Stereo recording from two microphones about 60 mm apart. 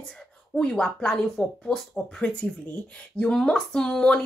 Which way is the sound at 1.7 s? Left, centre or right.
Centre.